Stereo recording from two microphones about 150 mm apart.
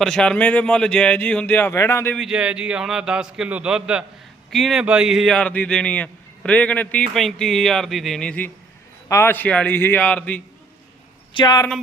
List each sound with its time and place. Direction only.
0.0 s speech: 5° left (ahead or behind)
2.1 s a man's voice: 5° right (ahead or behind)
11.3 s speech: 25° left (ahead or behind)